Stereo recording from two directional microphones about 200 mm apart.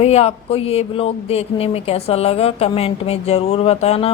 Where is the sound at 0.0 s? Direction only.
30° left (ahead or behind).